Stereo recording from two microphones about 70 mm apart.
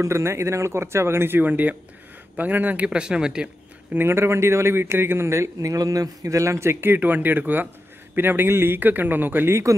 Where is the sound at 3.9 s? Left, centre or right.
Right.